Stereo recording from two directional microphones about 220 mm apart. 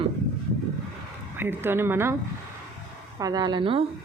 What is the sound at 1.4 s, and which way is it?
Speech, 10° right (ahead or behind).